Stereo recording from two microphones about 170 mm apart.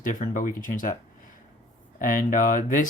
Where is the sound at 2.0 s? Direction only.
50° left (ahead or behind).